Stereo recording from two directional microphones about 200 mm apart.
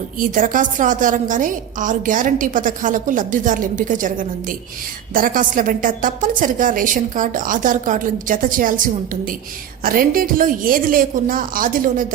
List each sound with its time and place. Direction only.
0.2 s a woman's voice: 40° right (ahead or behind)
9.8 s a woman's voice: 45° right (ahead or behind)